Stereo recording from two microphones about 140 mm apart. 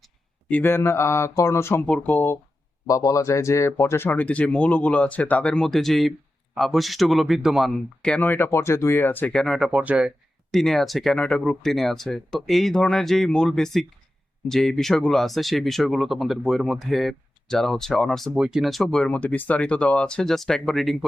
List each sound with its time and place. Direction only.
0.4 s speech: 15° left (ahead or behind)
2.8 s speech: 25° left (ahead or behind); by 10.1 s 10° right (ahead or behind)
10.5 s speech: centre (ahead or behind)